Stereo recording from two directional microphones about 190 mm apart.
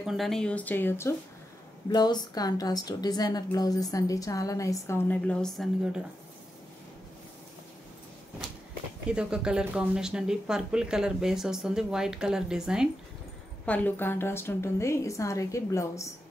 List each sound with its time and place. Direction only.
0.0 s a woman's voice: centre (ahead or behind)
9.0 s speech: 5° right (ahead or behind)
13.7 s a woman's voice: 10° left (ahead or behind)